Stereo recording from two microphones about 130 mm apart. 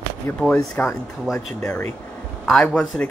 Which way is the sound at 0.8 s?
15° left (ahead or behind).